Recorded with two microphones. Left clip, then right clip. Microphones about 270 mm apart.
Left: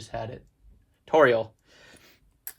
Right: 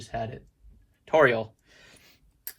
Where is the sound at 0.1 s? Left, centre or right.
Centre.